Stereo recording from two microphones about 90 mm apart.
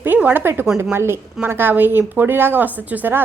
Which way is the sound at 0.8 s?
25° right (ahead or behind).